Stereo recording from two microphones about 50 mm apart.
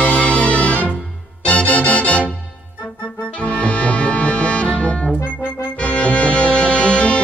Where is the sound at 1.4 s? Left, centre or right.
Left.